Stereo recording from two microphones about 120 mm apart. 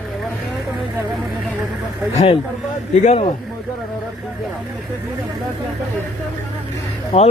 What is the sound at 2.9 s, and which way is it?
Speech, 75° left (ahead or behind).